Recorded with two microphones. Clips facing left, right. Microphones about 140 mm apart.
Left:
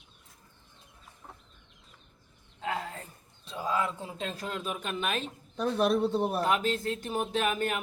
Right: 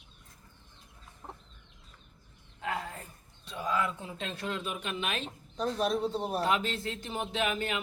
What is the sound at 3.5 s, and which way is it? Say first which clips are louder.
A man's voice: left 1 dB; 25° left (ahead or behind).